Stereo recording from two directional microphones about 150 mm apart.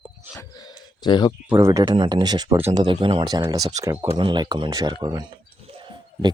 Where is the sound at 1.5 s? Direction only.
15° right (ahead or behind).